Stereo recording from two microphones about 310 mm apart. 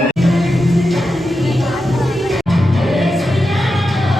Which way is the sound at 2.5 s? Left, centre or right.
Centre.